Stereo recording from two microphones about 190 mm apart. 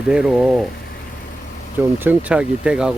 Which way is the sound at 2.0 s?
10° right (ahead or behind).